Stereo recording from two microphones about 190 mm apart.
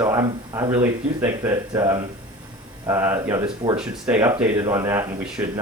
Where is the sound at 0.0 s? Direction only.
15° right (ahead or behind).